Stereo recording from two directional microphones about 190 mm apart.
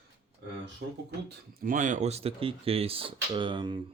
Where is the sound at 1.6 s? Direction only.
45° right (ahead or behind); by 3.7 s 25° right (ahead or behind).